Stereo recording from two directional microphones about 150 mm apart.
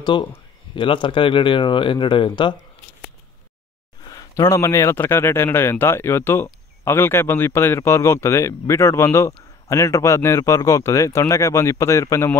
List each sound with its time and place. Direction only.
0.0 s speech: 30° left (ahead or behind)
4.0 s a man's voice: 20° left (ahead or behind)